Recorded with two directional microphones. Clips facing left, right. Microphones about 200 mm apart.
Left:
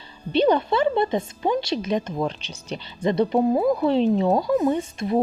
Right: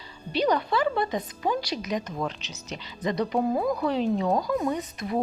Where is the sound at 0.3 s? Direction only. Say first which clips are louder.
Left 5 dB; 25° left (ahead or behind).